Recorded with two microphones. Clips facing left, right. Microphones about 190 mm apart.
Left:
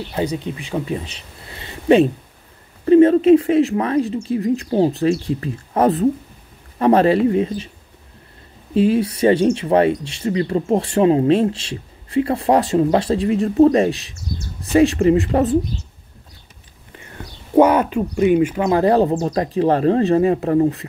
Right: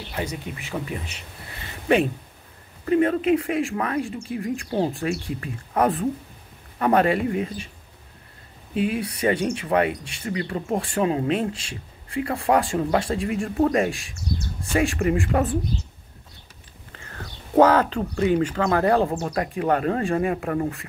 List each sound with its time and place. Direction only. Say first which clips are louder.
0.1 s speech: left 7 dB; 25° left (ahead or behind)
1.6 s a sound: left 7 dB; 25° left (ahead or behind)
2.8 s speech: left 9 dB; 30° left (ahead or behind)
8.7 s speech: left 9 dB; 30° left (ahead or behind)
16.9 s speech: left 3 dB; 15° left (ahead or behind)
18.7 s speech: left 5 dB; 25° left (ahead or behind)